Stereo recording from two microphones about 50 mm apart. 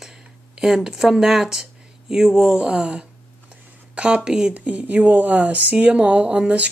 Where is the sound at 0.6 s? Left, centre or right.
Centre.